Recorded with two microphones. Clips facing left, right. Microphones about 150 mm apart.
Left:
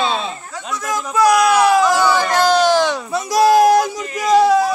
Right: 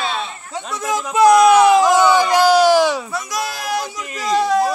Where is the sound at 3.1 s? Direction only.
30° left (ahead or behind).